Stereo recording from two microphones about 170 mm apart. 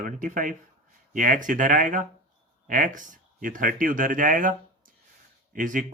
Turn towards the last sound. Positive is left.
turn(degrees=-50)  # may be behind; listen again after turning